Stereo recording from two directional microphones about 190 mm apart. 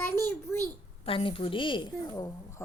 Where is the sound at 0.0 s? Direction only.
10° left (ahead or behind).